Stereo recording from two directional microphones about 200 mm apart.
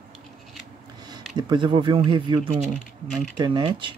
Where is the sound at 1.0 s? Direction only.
20° right (ahead or behind).